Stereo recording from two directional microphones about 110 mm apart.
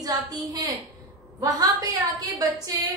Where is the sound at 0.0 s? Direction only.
35° right (ahead or behind).